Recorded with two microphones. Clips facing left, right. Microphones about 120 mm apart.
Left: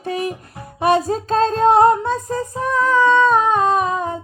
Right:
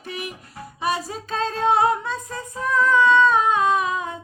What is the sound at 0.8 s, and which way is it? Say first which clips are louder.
Music: left 9 dB; 50° left (ahead or behind).